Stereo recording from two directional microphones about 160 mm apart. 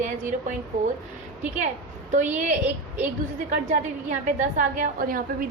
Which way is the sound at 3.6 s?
50° right (ahead or behind).